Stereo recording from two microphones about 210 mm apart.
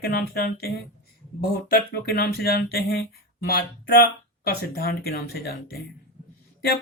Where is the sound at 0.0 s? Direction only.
45° left (ahead or behind).